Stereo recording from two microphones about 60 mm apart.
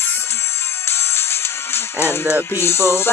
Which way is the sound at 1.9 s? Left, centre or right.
Left.